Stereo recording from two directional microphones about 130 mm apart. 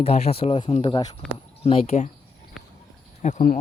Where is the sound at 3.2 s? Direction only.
70° left (ahead or behind).